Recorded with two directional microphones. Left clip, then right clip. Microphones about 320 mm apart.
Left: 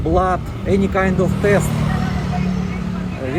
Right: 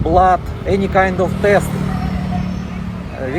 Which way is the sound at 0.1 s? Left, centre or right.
Centre.